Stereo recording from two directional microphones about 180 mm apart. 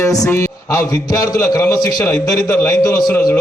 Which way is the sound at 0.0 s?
15° left (ahead or behind).